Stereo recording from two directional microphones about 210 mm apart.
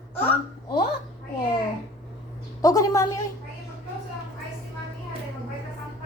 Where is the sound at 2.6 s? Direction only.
15° left (ahead or behind).